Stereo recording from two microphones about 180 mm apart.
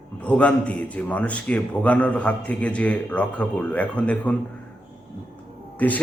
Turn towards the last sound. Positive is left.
turn(degrees=10)  # may be behind; listen again after turning